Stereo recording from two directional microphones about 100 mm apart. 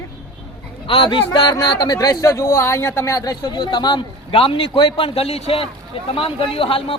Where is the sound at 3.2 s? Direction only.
40° left (ahead or behind); by 5.6 s 80° left.